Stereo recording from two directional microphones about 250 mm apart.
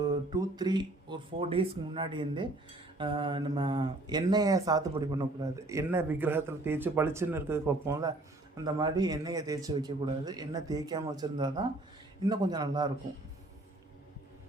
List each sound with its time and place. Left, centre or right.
0.3 s speech: centre